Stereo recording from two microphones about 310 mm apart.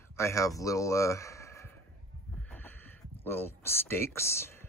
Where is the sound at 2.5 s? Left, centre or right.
Centre.